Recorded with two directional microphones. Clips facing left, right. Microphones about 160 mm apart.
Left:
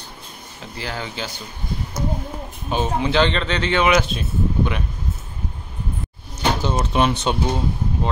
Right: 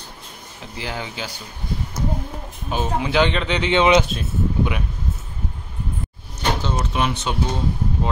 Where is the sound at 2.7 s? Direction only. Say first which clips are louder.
Left 2 dB; 5° right (ahead or behind); by 4.0 s 20° right (ahead or behind).